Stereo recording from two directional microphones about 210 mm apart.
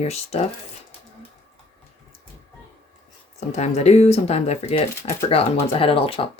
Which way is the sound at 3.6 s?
30° left (ahead or behind).